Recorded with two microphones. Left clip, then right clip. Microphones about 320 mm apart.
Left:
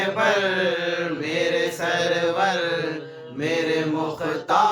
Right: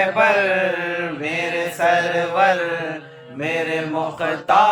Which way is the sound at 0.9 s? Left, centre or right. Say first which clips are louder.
Right 2 dB; centre.